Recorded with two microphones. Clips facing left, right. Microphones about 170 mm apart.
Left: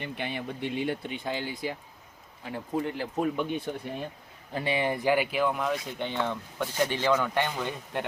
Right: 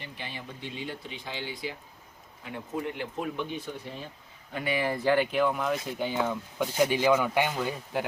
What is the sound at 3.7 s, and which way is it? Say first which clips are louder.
Speech: left 4 dB; 50° left (ahead or behind).